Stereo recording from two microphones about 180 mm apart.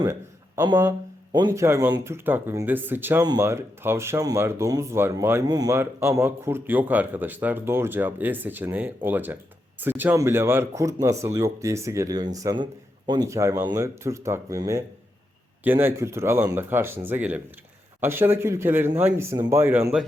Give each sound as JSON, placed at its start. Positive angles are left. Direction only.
{"t": 0.0, "sound": "a man's voice", "side_deg": -20}
{"t": 0.8, "sound": "a sound", "side_deg": -15}
{"t": 1.4, "sound": "speech", "side_deg": -20}